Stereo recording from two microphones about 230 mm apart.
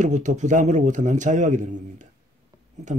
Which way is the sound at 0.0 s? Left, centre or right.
Right.